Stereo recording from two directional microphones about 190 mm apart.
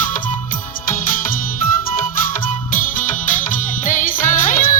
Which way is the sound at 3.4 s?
45° left (ahead or behind).